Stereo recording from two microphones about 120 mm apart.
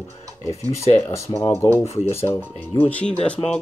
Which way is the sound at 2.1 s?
20° left (ahead or behind).